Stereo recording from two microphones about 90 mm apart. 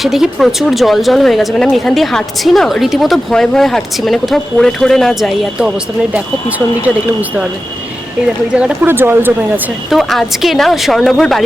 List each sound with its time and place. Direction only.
0.0 s a woman's voice: 5° right (ahead or behind)
8.5 s speech: 10° right (ahead or behind)
8.9 s speech: 25° right (ahead or behind)
9.9 s a woman's voice: centre (ahead or behind)